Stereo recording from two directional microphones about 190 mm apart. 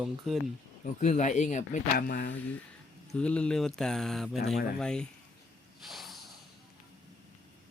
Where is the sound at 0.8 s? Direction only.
40° left (ahead or behind).